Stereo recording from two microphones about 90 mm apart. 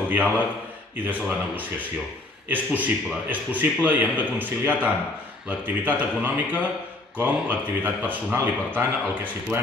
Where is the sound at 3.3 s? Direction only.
20° right (ahead or behind).